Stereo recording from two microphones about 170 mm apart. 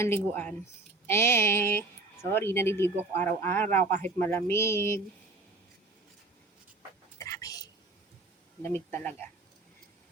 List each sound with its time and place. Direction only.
0.0 s speech: 15° left (ahead or behind)
7.2 s whispering: 20° left (ahead or behind)
8.6 s speech: 10° left (ahead or behind)